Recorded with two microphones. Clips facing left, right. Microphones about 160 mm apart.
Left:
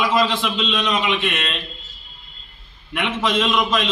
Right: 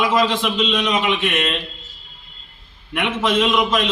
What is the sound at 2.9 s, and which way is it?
Speech, 10° right (ahead or behind).